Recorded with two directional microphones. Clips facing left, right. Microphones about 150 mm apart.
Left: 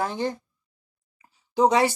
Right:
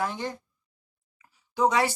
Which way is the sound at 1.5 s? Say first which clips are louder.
Left 4 dB; 25° left (ahead or behind).